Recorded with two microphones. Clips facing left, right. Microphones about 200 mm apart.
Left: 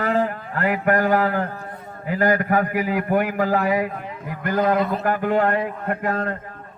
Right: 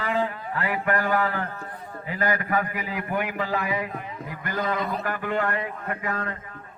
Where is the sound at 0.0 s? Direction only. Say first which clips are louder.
Left 5 dB; 45° left (ahead or behind).